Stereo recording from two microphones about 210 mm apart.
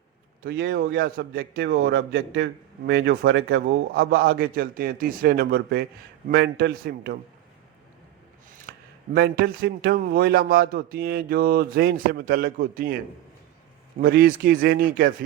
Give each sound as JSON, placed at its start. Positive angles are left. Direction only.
{"t": 0.4, "sound": "a man's voice", "side_deg": -50}
{"t": 8.7, "sound": "a sound", "side_deg": -45}
{"t": 9.1, "sound": "a man's voice", "side_deg": -45}
{"t": 14.0, "sound": "a man's voice", "side_deg": -45}